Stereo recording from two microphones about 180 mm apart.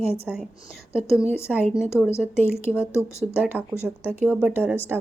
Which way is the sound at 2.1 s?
15° left (ahead or behind).